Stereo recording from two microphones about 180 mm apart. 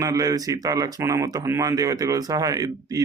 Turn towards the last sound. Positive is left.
turn(degrees=-20)  # may be behind; listen again after turning